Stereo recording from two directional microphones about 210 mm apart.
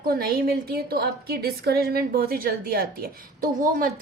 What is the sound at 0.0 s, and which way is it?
A woman's voice, 45° right (ahead or behind).